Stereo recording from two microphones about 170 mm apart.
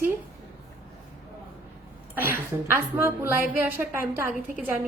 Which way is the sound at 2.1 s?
10° right (ahead or behind).